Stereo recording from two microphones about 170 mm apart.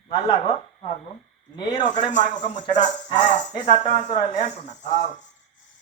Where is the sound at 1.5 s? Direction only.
25° left (ahead or behind).